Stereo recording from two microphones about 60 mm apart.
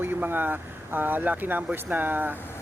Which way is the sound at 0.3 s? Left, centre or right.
Right.